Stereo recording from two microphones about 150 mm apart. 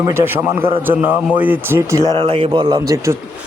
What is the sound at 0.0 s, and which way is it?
A man's voice, 15° right (ahead or behind).